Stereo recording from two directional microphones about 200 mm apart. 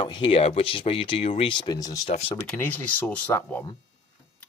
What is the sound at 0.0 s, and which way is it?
Speech, 25° left (ahead or behind).